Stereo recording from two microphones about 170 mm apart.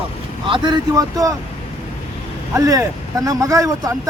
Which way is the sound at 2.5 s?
20° right (ahead or behind).